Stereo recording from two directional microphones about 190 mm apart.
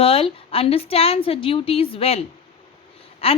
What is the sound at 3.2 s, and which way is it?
Speech, 30° left (ahead or behind).